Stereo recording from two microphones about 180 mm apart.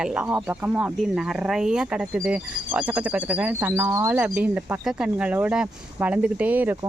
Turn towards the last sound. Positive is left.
turn(degrees=-10)  # may be behind; listen again after turning